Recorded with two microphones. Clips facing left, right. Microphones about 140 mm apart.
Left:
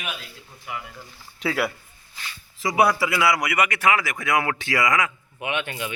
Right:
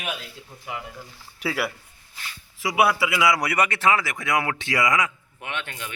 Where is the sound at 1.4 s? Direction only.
5° right (ahead or behind).